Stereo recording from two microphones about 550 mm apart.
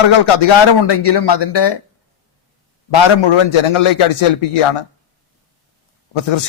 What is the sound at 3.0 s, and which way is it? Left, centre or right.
A man's voice, left.